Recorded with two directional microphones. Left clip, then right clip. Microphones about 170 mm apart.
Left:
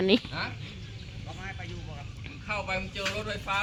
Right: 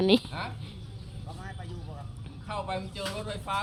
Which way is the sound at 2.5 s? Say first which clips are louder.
Left 2 dB; 35° left (ahead or behind).